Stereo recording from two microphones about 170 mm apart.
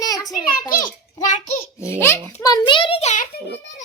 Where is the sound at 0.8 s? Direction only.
45° left (ahead or behind).